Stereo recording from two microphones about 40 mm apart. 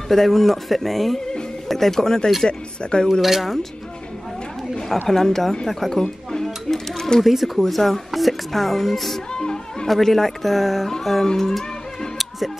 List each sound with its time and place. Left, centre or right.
0.1 s speech: centre
3.2 s speech: centre
5.0 s speech: centre
5.7 s a sound: centre
7.2 s speech: centre
9.3 s music: centre
9.8 s speech: centre